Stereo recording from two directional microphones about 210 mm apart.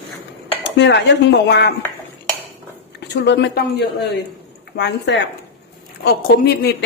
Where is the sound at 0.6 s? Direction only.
55° left (ahead or behind).